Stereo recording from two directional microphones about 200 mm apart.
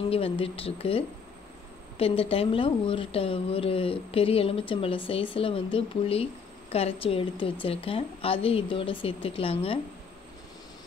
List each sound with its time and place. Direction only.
0.1 s speech: 30° left (ahead or behind)